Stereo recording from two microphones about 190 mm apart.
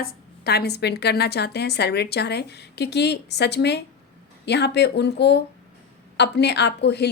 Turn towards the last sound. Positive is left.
turn(degrees=60)  # may be behind; listen again after turning